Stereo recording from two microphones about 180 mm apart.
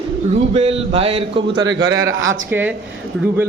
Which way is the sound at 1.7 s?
80° right.